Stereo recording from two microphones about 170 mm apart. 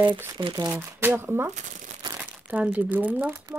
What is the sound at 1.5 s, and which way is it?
Speech, 50° right (ahead or behind).